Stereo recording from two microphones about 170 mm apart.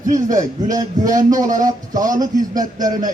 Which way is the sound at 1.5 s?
20° right (ahead or behind).